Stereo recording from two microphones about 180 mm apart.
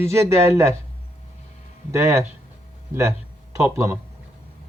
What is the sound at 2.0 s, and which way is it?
Speech, 15° right (ahead or behind).